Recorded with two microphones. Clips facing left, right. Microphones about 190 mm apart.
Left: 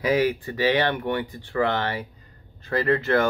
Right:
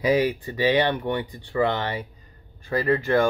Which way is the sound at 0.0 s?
15° right (ahead or behind).